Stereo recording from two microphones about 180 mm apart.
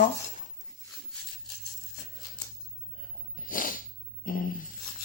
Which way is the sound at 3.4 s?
50° left (ahead or behind).